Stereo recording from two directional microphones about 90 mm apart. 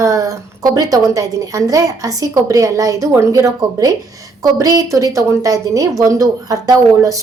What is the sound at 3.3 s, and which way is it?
A woman's voice, 45° right (ahead or behind).